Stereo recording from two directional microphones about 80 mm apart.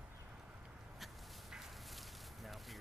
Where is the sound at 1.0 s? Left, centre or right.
Centre.